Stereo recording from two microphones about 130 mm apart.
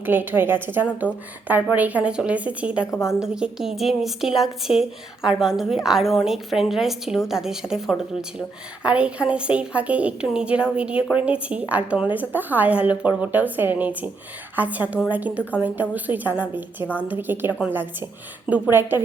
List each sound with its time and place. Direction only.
0.0 s a woman's voice: 15° right (ahead or behind)
2.9 s a woman's voice: 20° left (ahead or behind)
3.2 s a woman's voice: 5° right (ahead or behind)